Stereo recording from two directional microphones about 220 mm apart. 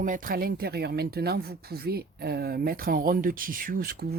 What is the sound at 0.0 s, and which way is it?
Speech, 40° right (ahead or behind).